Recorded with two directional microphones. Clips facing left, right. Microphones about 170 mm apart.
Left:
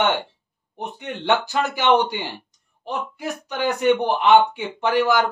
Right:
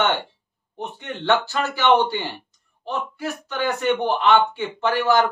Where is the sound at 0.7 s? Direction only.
15° left (ahead or behind).